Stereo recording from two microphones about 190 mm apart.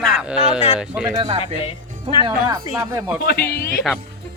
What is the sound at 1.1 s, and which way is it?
Speech, 25° right (ahead or behind).